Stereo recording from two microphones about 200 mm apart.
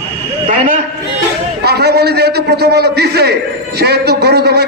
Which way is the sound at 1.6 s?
55° right (ahead or behind).